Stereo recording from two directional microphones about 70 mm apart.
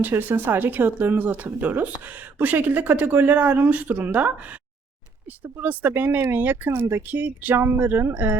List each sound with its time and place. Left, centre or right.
0.0 s speech: right
5.4 s speech: right